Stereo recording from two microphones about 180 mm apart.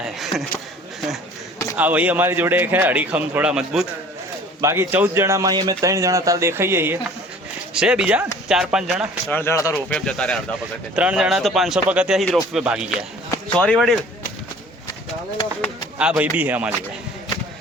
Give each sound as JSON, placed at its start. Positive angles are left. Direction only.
{"t": 0.0, "sound": "a sound", "side_deg": 0}
{"t": 1.7, "sound": "speech", "side_deg": -10}
{"t": 4.6, "sound": "speech", "side_deg": -15}
{"t": 9.3, "sound": "speech", "side_deg": 15}
{"t": 9.7, "sound": "speech", "side_deg": 5}
{"t": 10.9, "sound": "speech", "side_deg": -5}
{"t": 16.0, "sound": "speech", "side_deg": -5}